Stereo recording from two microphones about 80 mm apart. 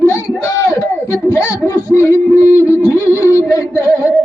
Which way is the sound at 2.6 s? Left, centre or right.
Left.